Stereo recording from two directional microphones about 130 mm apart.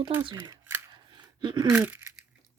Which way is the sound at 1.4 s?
35° right (ahead or behind).